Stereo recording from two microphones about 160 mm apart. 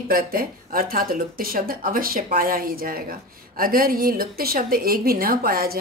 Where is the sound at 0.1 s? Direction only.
65° right (ahead or behind).